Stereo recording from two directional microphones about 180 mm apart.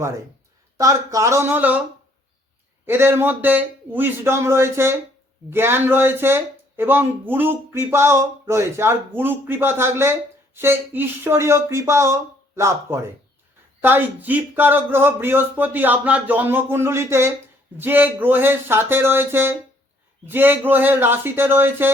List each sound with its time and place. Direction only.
0.8 s speech: 20° right (ahead or behind)
2.8 s speech: 15° right (ahead or behind)